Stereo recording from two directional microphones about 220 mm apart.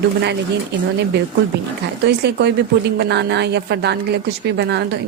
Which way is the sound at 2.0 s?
50° right (ahead or behind).